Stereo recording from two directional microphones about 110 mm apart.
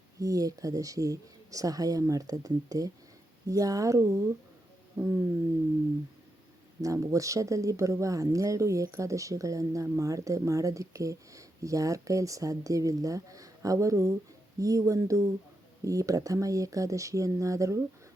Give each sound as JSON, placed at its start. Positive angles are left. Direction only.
{"t": 0.2, "sound": "speech", "side_deg": -30}
{"t": 6.8, "sound": "speech", "side_deg": -30}